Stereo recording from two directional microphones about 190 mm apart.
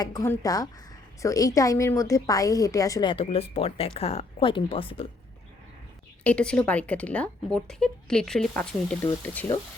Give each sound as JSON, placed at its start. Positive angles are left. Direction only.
{"t": 0.0, "sound": "a woman's voice", "side_deg": 20}
{"t": 6.2, "sound": "speech", "side_deg": 5}